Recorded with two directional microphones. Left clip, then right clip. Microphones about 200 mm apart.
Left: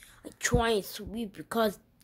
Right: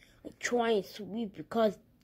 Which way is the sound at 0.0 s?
10° left (ahead or behind).